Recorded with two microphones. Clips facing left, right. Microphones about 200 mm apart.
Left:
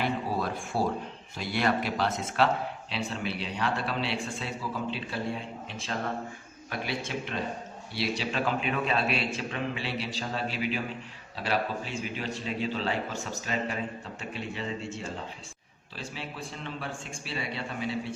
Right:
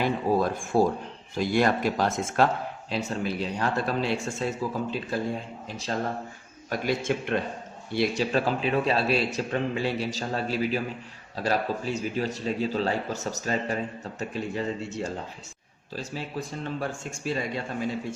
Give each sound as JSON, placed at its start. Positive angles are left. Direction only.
{"t": 0.0, "sound": "a man's voice", "side_deg": -45}